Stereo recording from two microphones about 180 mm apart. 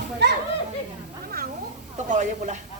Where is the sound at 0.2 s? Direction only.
70° right (ahead or behind).